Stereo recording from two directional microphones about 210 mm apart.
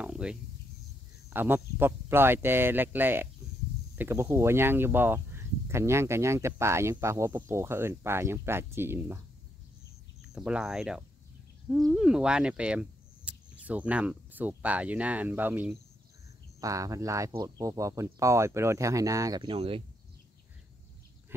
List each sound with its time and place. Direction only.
0.0 s cricket: 5° right (ahead or behind)
1.3 s speech: 10° right (ahead or behind)
10.2 s speech: 5° right (ahead or behind); by 19.8 s 25° right (ahead or behind)